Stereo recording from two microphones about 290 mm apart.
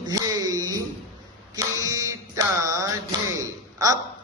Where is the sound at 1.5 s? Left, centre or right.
Centre.